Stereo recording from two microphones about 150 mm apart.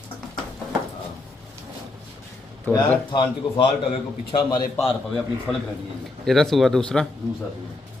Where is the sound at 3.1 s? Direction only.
35° left (ahead or behind).